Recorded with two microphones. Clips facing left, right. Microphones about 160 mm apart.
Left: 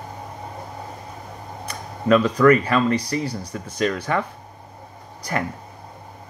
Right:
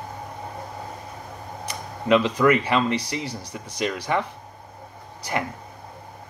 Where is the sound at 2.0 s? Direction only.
15° right (ahead or behind).